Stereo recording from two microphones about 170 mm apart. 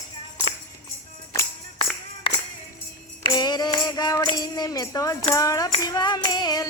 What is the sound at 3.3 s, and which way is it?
Music, 25° left (ahead or behind).